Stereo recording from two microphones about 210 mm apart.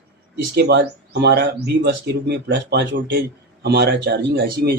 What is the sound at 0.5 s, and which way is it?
Speech, 55° right (ahead or behind).